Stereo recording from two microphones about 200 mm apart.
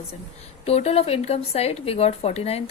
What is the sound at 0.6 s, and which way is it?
A woman's voice, 30° left (ahead or behind).